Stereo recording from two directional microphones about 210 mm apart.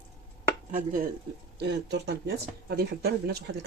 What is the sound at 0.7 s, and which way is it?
Chopping, 40° right (ahead or behind).